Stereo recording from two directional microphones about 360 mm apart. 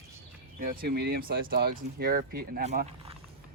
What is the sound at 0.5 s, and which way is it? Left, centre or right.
Speech, right.